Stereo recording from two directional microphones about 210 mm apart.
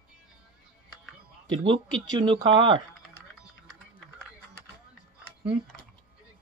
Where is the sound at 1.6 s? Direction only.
25° right (ahead or behind).